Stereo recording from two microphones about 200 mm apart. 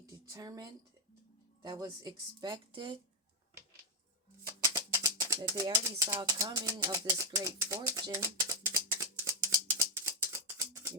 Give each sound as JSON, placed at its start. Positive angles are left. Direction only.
{"t": 0.0, "sound": "a sound", "side_deg": -15}
{"t": 1.6, "sound": "speech", "side_deg": -20}
{"t": 4.7, "sound": "rattle", "side_deg": -15}